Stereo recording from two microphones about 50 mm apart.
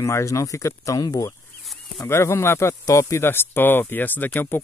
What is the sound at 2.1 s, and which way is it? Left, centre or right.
Speech, left.